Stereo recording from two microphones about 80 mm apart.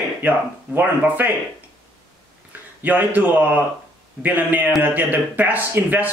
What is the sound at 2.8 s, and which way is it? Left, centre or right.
A man's voice, right.